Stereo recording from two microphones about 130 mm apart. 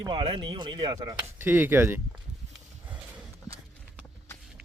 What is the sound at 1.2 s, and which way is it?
Speech, 15° right (ahead or behind).